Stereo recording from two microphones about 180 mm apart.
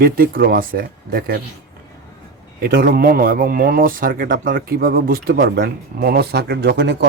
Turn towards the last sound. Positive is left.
turn(degrees=-65)  # may be behind; listen again after turning